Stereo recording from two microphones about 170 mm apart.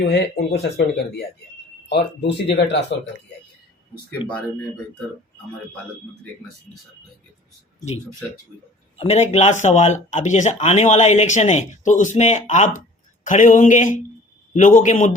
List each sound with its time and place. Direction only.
0.0 s speech: 70° left (ahead or behind)
1.9 s speech: 85° left
4.2 s speech: 30° left (ahead or behind)
9.0 s speech: 40° left (ahead or behind)